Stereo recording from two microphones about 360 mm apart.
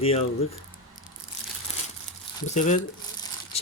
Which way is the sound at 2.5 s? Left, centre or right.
Centre.